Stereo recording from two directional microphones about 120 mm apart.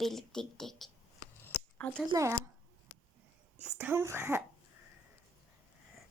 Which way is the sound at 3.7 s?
20° right (ahead or behind).